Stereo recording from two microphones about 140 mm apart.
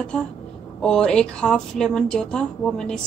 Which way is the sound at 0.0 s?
10° left (ahead or behind).